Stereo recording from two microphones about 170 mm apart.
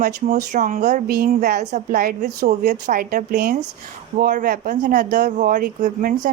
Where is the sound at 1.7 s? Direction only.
60° right (ahead or behind).